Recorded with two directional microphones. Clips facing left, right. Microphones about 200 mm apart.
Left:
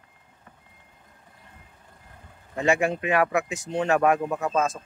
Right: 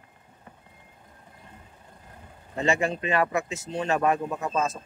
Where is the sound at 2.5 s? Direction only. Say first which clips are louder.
Left 2 dB; 10° left (ahead or behind).